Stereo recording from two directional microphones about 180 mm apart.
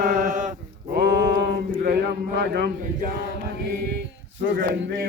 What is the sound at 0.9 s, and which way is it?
Mantra, 70° right (ahead or behind).